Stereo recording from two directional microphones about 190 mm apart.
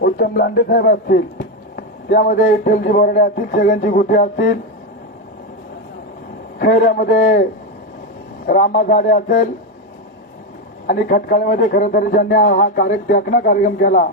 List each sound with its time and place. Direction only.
0.0 s a man's voice: 50° left (ahead or behind)
6.6 s a man's voice: 55° left (ahead or behind)
8.4 s a man's voice: 45° left (ahead or behind)
10.8 s a man's voice: 45° left (ahead or behind)